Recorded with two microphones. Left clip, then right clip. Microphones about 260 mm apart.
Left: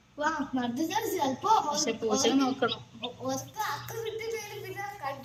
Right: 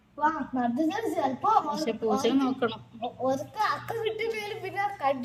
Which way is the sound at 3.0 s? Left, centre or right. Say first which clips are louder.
Right 6 dB; right.